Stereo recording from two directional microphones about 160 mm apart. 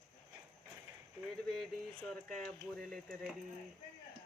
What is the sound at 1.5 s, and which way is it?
Speech, 5° left (ahead or behind).